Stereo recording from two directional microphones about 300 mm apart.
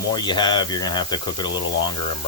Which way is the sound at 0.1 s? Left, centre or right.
Centre.